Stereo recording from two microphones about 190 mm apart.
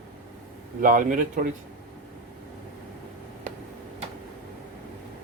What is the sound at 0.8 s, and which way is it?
Speech, 45° right (ahead or behind).